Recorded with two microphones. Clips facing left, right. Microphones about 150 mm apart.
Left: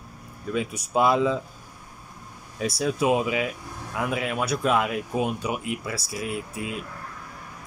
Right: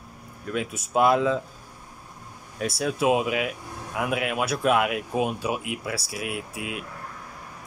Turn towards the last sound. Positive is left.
turn(degrees=-10)  # may be behind; listen again after turning